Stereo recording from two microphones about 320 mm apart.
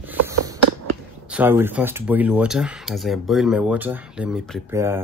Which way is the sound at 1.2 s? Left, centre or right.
Centre.